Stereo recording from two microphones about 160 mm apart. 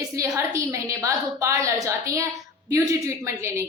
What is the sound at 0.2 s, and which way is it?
A woman's voice, 20° right (ahead or behind).